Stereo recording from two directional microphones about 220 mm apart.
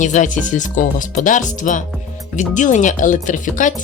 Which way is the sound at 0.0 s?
35° left (ahead or behind).